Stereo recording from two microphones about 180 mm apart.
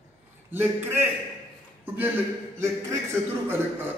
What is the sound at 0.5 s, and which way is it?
A man's voice, 10° right (ahead or behind).